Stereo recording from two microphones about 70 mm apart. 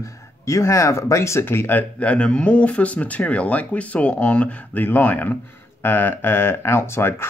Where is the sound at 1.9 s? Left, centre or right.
Centre.